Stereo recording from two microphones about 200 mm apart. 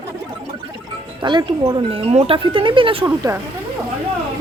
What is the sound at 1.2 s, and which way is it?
Speech, 25° right (ahead or behind).